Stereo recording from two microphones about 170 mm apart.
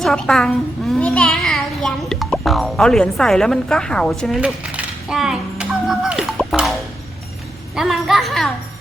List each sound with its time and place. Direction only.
0.0 s a child's voice: 5° left (ahead or behind)
7.8 s speech: centre (ahead or behind)